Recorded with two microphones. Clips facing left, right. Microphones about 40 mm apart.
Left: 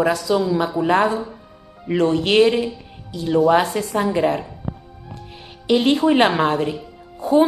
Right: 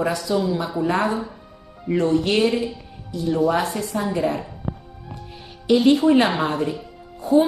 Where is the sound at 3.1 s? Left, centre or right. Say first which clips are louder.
Left 3 dB; left.